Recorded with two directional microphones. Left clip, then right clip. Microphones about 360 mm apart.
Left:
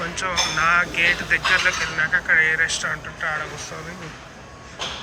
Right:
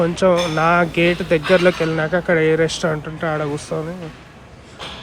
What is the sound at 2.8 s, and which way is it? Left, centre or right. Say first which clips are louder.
Speech: right 4 dB; right.